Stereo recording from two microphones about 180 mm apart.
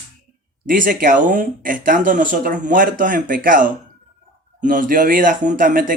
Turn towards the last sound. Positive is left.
turn(degrees=-50)  # may be behind; listen again after turning